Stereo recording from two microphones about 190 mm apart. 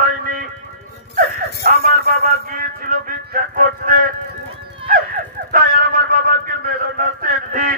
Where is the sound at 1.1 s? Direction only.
50° right (ahead or behind).